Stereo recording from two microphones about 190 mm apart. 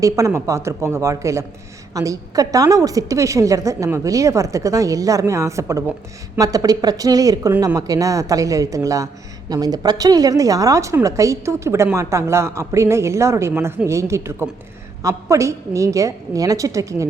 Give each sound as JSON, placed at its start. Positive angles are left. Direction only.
{"t": 0.0, "sound": "a woman's voice", "side_deg": -15}